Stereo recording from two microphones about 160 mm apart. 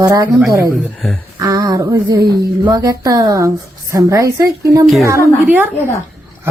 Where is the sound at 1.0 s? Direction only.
5° left (ahead or behind).